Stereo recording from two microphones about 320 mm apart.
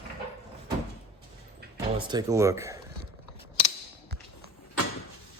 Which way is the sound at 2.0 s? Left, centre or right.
Centre.